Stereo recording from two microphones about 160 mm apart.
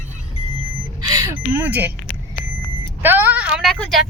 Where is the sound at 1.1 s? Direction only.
20° right (ahead or behind).